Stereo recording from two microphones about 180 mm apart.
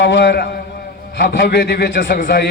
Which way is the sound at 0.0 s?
75° left (ahead or behind).